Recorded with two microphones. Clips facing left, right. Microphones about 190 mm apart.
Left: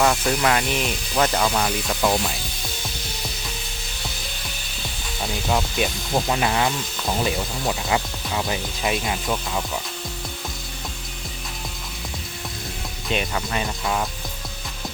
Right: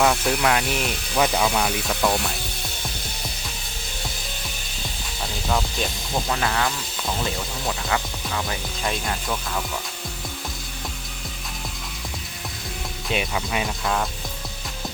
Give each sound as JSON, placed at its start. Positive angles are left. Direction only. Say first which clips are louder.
{"t": 0.0, "sound": "speech", "louder": "even", "side_deg": 0}
{"t": 5.5, "sound": "speech", "louder": "left 2 dB", "side_deg": 10}
{"t": 13.1, "sound": "speech", "louder": "left 1 dB", "side_deg": -5}